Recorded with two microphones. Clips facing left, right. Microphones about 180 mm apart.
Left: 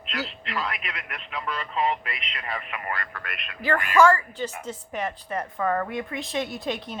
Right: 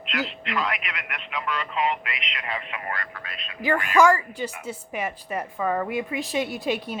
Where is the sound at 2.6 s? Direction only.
55° left (ahead or behind).